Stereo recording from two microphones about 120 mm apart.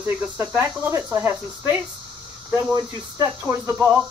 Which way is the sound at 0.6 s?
20° right (ahead or behind).